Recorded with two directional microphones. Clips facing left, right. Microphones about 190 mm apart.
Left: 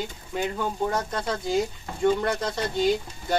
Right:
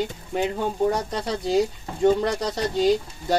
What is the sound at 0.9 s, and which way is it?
Speech, 35° right (ahead or behind).